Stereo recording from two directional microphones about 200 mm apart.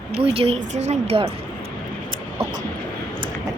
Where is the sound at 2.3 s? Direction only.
15° right (ahead or behind).